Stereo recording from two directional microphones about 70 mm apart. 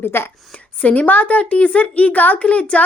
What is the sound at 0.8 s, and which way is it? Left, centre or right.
A woman's voice, left.